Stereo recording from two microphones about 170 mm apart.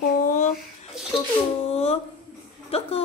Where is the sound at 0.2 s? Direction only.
50° left (ahead or behind).